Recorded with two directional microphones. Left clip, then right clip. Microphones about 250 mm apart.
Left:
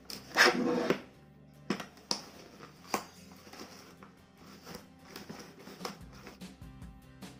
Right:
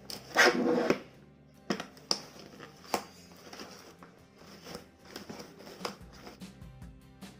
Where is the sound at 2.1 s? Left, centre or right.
Centre.